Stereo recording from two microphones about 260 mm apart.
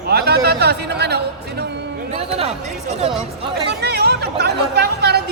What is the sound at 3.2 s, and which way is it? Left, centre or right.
Speech, right.